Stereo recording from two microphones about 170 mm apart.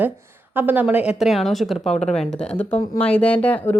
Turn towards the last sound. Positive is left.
turn(degrees=10)  # may be behind; listen again after turning